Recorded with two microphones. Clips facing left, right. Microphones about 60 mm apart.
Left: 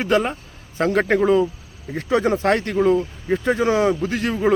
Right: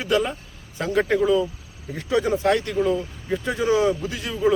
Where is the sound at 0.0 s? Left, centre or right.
Left.